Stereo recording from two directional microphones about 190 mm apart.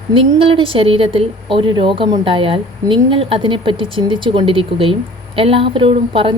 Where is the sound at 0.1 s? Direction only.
30° right (ahead or behind).